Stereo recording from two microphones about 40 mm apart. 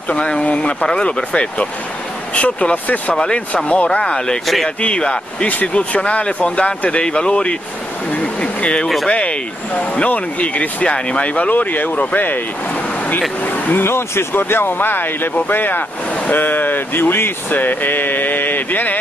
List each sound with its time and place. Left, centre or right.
0.1 s speech: left
2.3 s speech: left
3.2 s speech: left
5.5 s speech: left
8.4 s a sound: left
9.1 s speech: left
13.4 s speech: left
13.8 s speech: left